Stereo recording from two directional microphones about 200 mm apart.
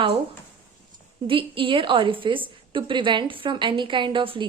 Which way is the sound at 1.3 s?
25° right (ahead or behind).